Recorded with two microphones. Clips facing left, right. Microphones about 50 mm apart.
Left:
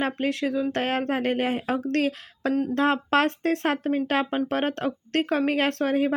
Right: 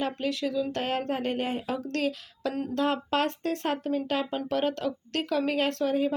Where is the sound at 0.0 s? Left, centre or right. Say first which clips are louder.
Left 4 dB; left.